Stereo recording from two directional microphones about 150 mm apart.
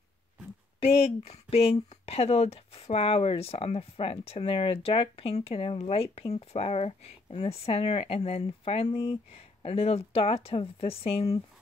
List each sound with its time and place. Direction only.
0.7 s speech: 40° left (ahead or behind)
8.8 s speech: 25° left (ahead or behind)
9.4 s speech: 40° left (ahead or behind)